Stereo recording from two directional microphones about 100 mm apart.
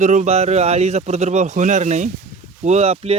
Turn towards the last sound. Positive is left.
turn(degrees=-85)